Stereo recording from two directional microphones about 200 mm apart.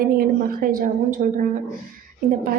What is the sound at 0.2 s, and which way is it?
A woman's voice, 45° right (ahead or behind).